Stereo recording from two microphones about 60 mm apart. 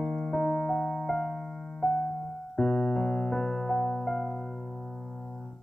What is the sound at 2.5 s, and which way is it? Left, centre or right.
Music, centre.